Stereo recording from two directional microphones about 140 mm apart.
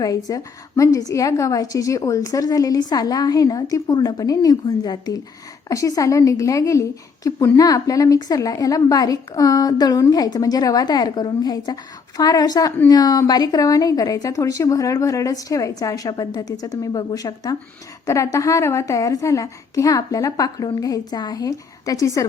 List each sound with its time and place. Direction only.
0.0 s a woman's voice: 25° left (ahead or behind)